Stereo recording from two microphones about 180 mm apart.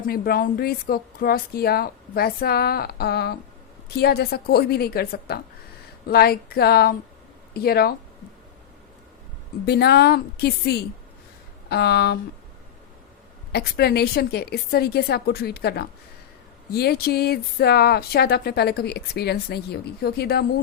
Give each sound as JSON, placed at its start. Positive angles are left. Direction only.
{"t": 0.1, "sound": "speech", "side_deg": 55}
{"t": 9.6, "sound": "speech", "side_deg": 65}
{"t": 13.5, "sound": "speech", "side_deg": 60}